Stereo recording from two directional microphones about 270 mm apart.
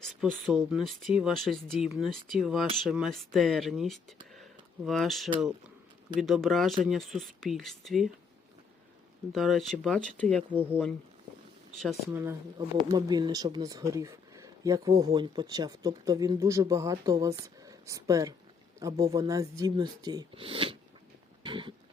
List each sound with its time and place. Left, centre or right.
0.2 s speech: centre
9.3 s speech: centre
12.1 s speech: centre
21.4 s a sound: centre